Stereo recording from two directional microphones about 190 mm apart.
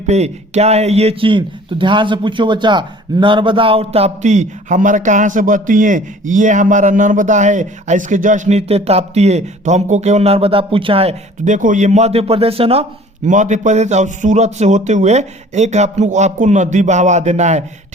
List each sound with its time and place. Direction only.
0.1 s speech: 35° right (ahead or behind)